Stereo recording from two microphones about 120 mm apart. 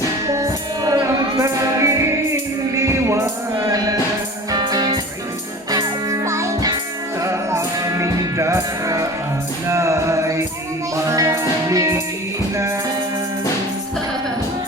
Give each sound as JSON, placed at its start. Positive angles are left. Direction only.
{"t": 0.3, "sound": "music", "side_deg": -30}
{"t": 4.5, "sound": "music", "side_deg": -35}